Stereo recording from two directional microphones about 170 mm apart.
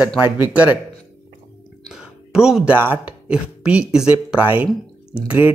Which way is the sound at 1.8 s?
5° right (ahead or behind).